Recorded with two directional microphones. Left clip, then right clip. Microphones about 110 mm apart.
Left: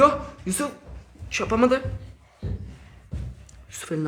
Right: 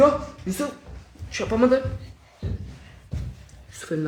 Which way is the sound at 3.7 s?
10° left (ahead or behind).